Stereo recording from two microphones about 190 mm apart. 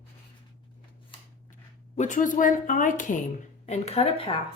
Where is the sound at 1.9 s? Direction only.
40° left (ahead or behind).